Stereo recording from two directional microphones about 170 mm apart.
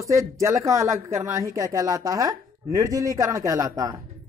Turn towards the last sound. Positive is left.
turn(degrees=-20)  # may be behind; listen again after turning